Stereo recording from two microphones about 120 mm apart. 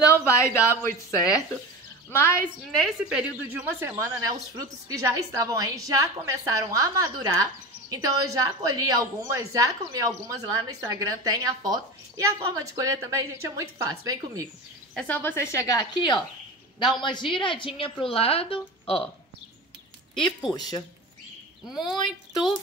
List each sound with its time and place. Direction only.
0.0 s a woman's voice: 25° left (ahead or behind)
2.7 s a woman's voice: 5° right (ahead or behind)
3.6 s a woman's voice: 20° right (ahead or behind)
15.0 s a woman's voice: 10° left (ahead or behind); by 19.0 s 50° left (ahead or behind)
21.6 s speech: 5° right (ahead or behind)